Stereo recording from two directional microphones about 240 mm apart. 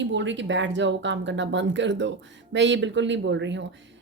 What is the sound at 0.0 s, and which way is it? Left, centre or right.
Speech, right.